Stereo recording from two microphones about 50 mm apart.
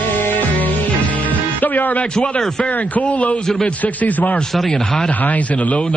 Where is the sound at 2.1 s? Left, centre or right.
Centre.